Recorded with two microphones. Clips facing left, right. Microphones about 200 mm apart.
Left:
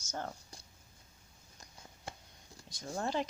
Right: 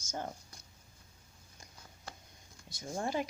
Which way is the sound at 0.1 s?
15° right (ahead or behind).